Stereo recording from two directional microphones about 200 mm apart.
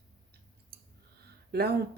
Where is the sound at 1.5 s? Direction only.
55° right (ahead or behind).